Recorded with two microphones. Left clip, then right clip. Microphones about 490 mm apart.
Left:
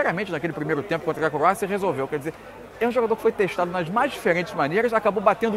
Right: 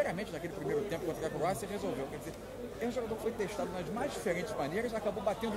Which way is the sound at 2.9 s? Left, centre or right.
Left.